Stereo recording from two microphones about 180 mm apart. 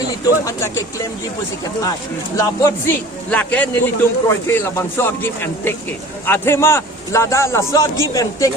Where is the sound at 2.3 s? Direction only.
20° left (ahead or behind).